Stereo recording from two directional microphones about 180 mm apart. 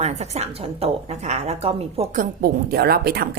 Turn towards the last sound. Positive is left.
turn(degrees=-55)  # may be behind; listen again after turning